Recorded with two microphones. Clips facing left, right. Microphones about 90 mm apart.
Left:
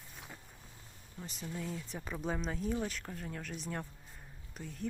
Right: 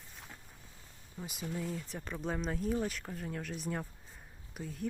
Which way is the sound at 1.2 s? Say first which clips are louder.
Right 3 dB; 10° right (ahead or behind).